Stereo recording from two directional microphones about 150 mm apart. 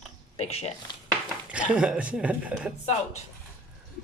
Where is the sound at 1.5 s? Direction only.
5° right (ahead or behind).